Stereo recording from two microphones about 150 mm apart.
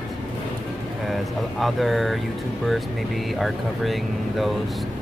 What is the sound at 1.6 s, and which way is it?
Speech, centre (ahead or behind).